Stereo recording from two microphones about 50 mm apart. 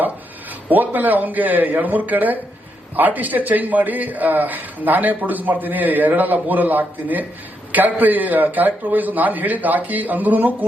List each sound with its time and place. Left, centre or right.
0.7 s a man's voice: right